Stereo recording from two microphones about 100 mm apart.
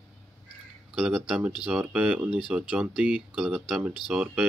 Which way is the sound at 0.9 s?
5° right (ahead or behind).